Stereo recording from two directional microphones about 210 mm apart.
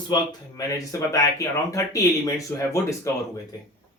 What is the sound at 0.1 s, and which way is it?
Speech, 20° left (ahead or behind).